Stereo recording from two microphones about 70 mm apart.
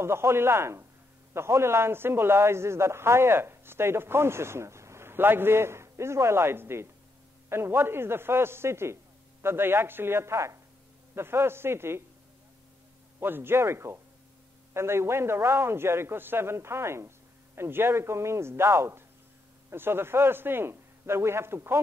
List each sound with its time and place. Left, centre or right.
0.0 s a man's voice: right
13.2 s a man's voice: right